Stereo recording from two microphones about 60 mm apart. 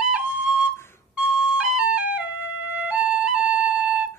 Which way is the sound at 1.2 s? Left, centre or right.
Centre.